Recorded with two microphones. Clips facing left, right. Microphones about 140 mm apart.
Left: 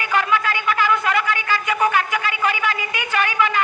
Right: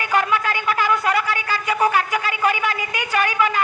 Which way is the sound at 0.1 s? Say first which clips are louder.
Even; 40° right (ahead or behind).